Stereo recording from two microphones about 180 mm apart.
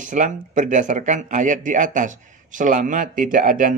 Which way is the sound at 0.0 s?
45° right (ahead or behind).